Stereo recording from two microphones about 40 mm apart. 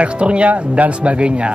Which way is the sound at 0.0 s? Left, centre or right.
Right.